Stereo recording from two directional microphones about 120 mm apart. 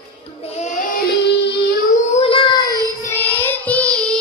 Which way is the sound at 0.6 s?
90° left.